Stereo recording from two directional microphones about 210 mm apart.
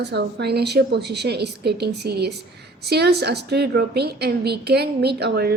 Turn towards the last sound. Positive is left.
turn(degrees=-50)  # may be behind; listen again after turning